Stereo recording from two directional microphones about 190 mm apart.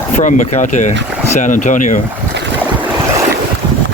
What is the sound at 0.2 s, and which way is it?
Speech, 40° left (ahead or behind).